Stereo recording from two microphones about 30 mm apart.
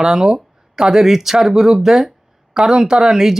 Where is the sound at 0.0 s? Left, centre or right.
Right.